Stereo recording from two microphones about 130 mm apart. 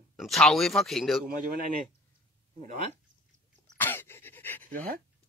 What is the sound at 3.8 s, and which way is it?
Pant, 15° left (ahead or behind).